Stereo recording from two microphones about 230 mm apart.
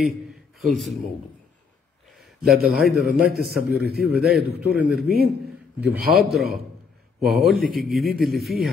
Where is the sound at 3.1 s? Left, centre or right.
Right.